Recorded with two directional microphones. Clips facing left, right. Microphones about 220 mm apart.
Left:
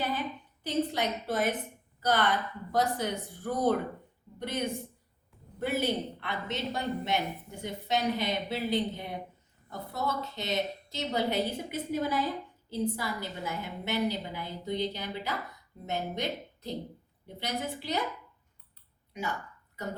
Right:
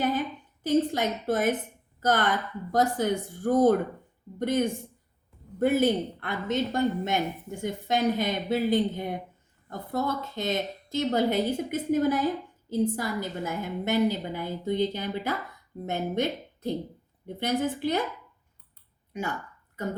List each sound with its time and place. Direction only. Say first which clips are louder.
0.0 s a woman's voice: right 6 dB; 45° right (ahead or behind)
19.1 s a woman's voice: right 4 dB; 50° right (ahead or behind)